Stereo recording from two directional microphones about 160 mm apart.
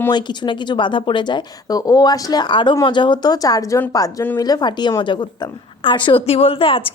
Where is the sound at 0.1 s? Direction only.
30° left (ahead or behind).